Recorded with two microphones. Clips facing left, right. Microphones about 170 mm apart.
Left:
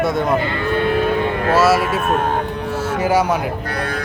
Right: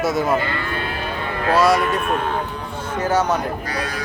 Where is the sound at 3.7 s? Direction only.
55° left (ahead or behind).